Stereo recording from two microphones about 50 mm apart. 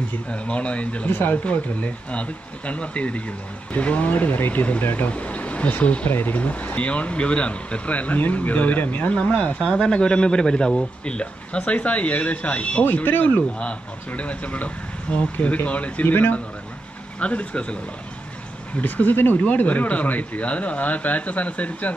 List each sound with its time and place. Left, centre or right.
0.3 s speech: left
1.0 s speech: left
1.4 s speech: left
9.1 s speech: left
9.6 s speech: centre
12.8 s speech: left
13.4 s speech: left
17.2 s speech: left
18.8 s speech: left